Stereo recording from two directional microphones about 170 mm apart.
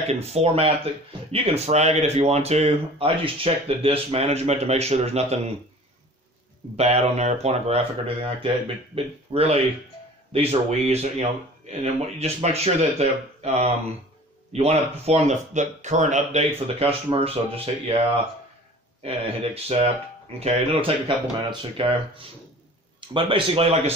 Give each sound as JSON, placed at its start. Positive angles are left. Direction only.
{"t": 0.1, "sound": "speech", "side_deg": -40}
{"t": 6.8, "sound": "speech", "side_deg": -40}
{"t": 19.0, "sound": "speech", "side_deg": -35}